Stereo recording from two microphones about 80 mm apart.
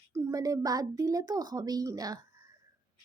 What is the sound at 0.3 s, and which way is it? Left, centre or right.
A woman's voice, right.